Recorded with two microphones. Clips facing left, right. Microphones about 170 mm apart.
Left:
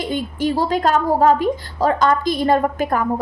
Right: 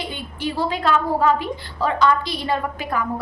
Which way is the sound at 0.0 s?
45° left (ahead or behind).